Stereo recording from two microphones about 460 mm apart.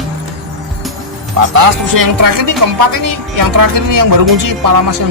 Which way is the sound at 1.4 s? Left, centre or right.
Right.